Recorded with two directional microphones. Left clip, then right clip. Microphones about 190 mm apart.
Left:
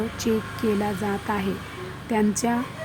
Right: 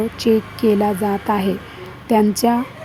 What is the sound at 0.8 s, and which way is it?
A woman's voice, 20° right (ahead or behind).